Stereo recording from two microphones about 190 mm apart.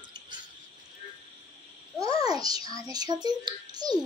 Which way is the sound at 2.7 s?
20° right (ahead or behind).